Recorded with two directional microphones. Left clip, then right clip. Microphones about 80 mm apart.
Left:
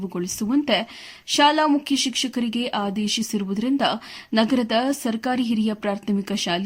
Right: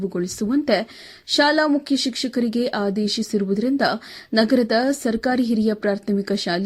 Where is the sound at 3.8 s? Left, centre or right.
Centre.